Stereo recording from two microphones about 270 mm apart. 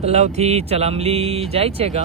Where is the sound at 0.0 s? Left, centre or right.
Right.